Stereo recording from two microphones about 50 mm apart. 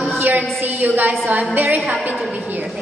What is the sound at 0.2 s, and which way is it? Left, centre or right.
A woman's voice, right.